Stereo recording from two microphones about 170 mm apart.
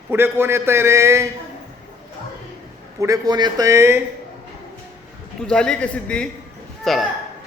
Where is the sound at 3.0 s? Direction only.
20° right (ahead or behind).